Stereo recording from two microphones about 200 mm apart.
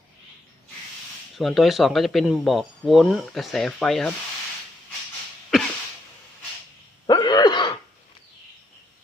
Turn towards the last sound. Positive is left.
turn(degrees=20)  # may be behind; listen again after turning